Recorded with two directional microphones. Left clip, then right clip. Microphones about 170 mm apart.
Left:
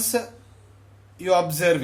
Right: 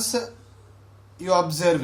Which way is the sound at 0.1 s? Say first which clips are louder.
Left 2 dB; 35° left (ahead or behind).